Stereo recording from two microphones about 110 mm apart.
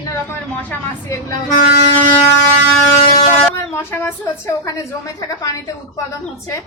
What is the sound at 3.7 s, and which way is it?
A woman's voice, 20° left (ahead or behind).